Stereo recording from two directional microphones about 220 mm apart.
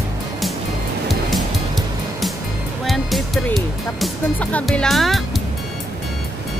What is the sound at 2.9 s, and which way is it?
Speech, centre (ahead or behind).